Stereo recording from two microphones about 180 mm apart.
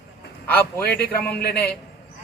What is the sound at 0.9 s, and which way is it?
Speech, 60° left (ahead or behind).